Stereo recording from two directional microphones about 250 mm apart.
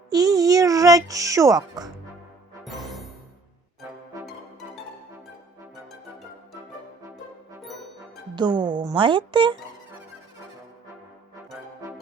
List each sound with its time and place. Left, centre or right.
0.1 s music: centre
2.6 s music: centre
8.4 s speech: centre